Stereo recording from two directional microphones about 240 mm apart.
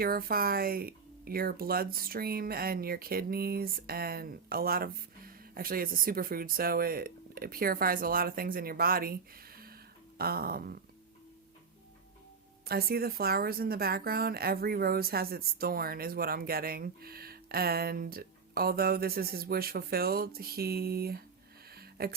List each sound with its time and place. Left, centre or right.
0.0 s speech: right
12.6 s speech: right
21.7 s music: right